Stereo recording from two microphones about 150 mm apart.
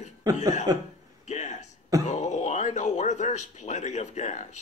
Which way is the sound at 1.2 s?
50° left (ahead or behind).